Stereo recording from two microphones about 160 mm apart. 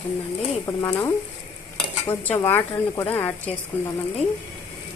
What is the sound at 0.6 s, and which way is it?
Stir, 20° left (ahead or behind).